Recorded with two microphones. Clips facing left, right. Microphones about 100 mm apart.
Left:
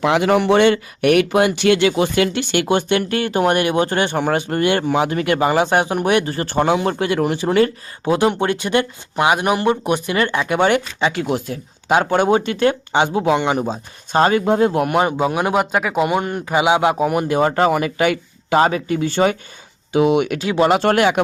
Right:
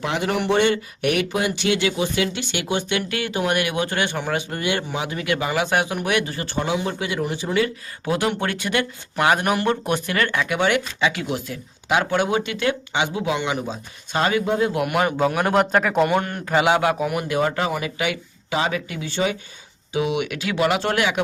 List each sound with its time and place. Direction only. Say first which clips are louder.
0.0 s speech: left 8 dB; 90° left; by 3.0 s 55° left (ahead or behind)
3.1 s speech: left 6 dB; 40° left (ahead or behind)
4.2 s speech: left 7 dB; 50° left (ahead or behind)
8.0 s speech: left 6 dB; 25° left (ahead or behind)
10.6 s speech: left 4 dB; 35° left (ahead or behind)
15.2 s a man's voice: left 1 dB; 15° left (ahead or behind); by 17.7 s 40° left (ahead or behind)
17.7 s speech: left 8 dB; 50° left (ahead or behind); by 20.7 s 30° left (ahead or behind)
20.7 s speech: left 6 dB; 45° left (ahead or behind)